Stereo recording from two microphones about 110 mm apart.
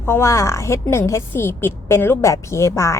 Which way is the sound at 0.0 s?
20° left (ahead or behind).